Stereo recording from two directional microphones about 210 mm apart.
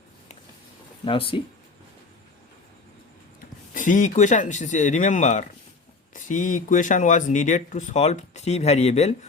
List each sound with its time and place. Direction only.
1.0 s speech: 25° left (ahead or behind)
3.8 s speech: 40° left (ahead or behind)